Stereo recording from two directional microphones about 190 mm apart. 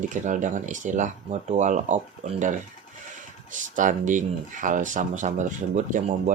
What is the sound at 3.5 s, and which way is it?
Speech, 40° right (ahead or behind).